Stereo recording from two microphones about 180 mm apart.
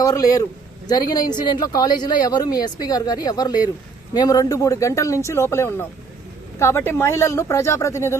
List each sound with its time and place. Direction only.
0.0 s speech: 20° left (ahead or behind)